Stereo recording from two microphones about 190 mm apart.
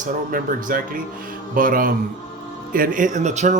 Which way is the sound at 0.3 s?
45° right (ahead or behind).